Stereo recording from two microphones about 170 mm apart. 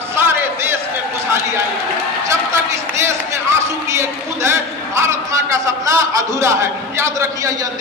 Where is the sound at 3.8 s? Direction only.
15° right (ahead or behind).